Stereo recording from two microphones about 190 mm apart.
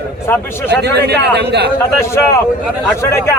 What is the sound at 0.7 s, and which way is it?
A man's voice, 60° right (ahead or behind).